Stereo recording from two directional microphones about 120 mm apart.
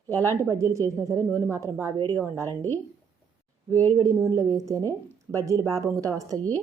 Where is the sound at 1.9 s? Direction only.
25° left (ahead or behind).